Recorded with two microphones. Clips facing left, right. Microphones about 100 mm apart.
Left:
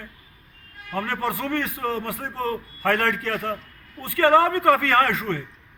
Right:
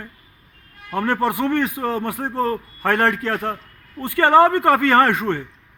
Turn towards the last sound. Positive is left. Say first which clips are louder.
# right 5 dB
turn(degrees=-25)  # may be behind; listen again after turning